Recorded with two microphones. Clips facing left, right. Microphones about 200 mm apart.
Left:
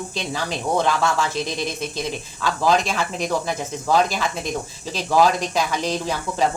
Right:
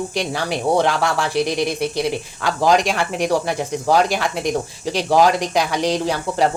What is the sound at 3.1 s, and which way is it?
Speech, 75° right (ahead or behind).